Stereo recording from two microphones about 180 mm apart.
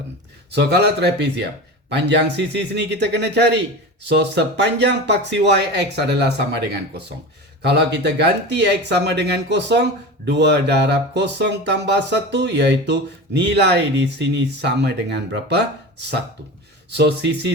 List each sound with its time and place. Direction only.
0.5 s speech: 70° right (ahead or behind)
7.6 s speech: 70° right (ahead or behind)